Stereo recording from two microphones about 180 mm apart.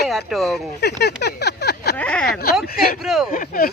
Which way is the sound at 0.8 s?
65° left (ahead or behind).